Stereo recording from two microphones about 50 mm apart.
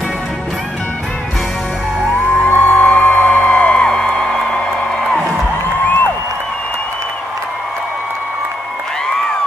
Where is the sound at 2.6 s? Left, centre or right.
Left.